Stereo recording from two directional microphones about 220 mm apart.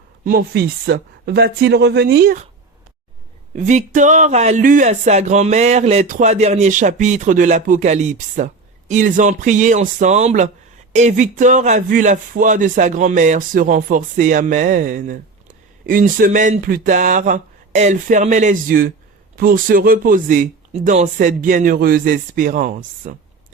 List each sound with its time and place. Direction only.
0.3 s speech: 45° right (ahead or behind)
3.5 s speech: 35° right (ahead or behind)